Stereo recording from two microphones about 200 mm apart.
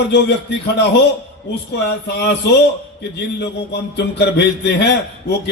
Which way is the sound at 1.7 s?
55° left (ahead or behind).